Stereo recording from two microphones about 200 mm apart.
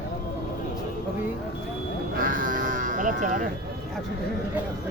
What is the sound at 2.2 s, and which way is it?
Sheep, 45° right (ahead or behind).